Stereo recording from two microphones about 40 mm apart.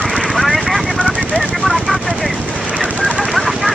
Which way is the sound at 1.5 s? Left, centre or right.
Centre.